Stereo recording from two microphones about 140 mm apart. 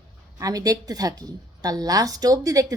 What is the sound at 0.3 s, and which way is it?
Speech, 25° right (ahead or behind).